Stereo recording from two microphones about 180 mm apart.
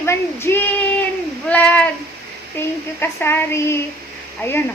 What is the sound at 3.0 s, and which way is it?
Speech, 10° left (ahead or behind).